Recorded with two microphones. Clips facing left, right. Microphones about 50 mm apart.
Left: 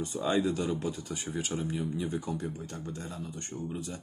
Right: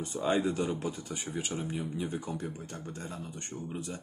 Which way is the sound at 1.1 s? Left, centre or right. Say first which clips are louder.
Left 1 dB; centre.